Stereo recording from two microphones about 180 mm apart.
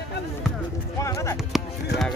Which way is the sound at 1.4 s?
Centre (ahead or behind).